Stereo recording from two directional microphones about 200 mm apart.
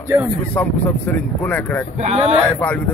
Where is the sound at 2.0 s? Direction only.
30° right (ahead or behind).